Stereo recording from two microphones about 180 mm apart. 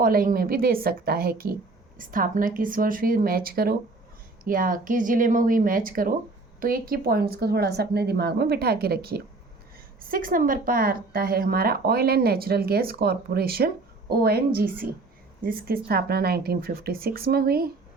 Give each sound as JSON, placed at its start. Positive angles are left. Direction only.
{"t": 0.0, "sound": "a woman's voice", "side_deg": -55}